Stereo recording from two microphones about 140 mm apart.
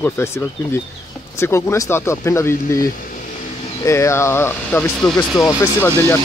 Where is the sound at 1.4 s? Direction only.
20° left (ahead or behind).